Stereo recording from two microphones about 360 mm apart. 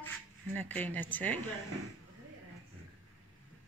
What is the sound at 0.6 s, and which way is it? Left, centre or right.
Speech, centre.